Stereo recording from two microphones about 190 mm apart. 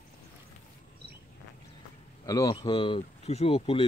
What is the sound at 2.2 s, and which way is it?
Speech, 20° left (ahead or behind).